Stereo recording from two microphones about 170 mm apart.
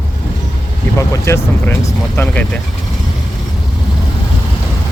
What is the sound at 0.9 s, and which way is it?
Speech, 15° left (ahead or behind).